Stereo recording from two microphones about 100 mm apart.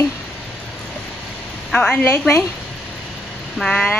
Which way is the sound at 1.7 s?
5° left (ahead or behind).